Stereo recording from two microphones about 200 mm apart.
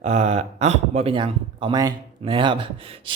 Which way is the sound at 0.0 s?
35° right (ahead or behind).